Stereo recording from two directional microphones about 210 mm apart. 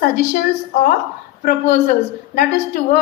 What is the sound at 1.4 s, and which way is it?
Speech, 45° left (ahead or behind).